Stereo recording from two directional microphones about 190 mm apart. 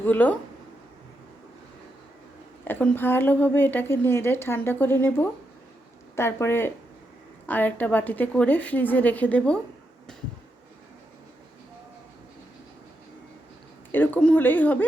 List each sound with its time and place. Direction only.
0.0 s a woman's voice: 10° left (ahead or behind)
2.6 s a woman's voice: 10° left (ahead or behind)
13.9 s a woman's voice: 10° left (ahead or behind)